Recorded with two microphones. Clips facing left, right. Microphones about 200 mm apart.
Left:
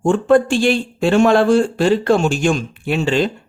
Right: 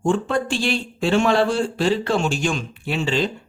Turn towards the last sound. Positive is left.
turn(degrees=55)  # may be behind; listen again after turning